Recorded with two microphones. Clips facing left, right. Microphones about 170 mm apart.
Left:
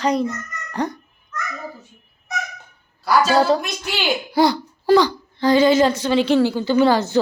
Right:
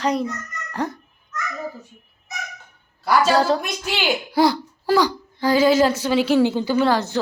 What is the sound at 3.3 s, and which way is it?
A woman's voice, centre (ahead or behind).